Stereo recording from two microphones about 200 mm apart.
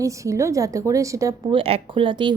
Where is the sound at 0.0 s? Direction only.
15° right (ahead or behind).